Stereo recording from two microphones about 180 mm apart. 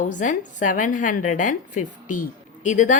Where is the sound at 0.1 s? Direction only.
45° left (ahead or behind).